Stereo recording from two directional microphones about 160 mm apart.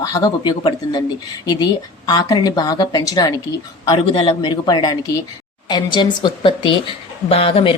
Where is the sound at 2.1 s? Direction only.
25° left (ahead or behind).